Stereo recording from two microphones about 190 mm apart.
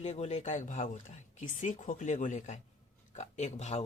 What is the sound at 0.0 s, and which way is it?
Speech, 35° left (ahead or behind).